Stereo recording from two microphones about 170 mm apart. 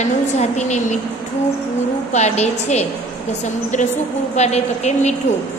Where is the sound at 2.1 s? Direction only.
40° left (ahead or behind).